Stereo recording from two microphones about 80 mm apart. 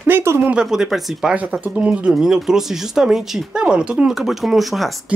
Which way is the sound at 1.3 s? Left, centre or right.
Centre.